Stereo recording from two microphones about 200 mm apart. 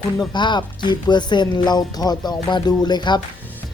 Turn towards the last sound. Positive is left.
turn(degrees=20)  # may be behind; listen again after turning